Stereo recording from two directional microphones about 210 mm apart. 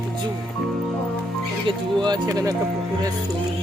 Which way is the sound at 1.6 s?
20° right (ahead or behind).